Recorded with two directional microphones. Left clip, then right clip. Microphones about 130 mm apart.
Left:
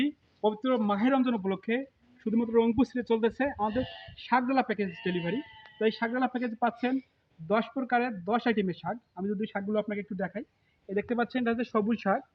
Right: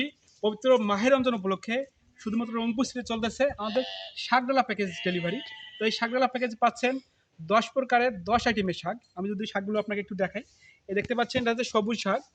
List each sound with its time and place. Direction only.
0.0 s speech: 45° right (ahead or behind)
4.3 s speech: 40° right (ahead or behind); by 12.2 s 60° right (ahead or behind)